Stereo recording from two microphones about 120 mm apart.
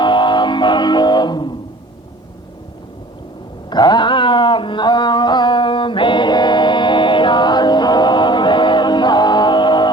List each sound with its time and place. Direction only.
0.0 s music: 40° left (ahead or behind)
3.7 s music: 35° left (ahead or behind)